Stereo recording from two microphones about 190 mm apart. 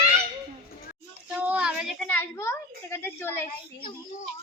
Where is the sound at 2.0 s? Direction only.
10° left (ahead or behind).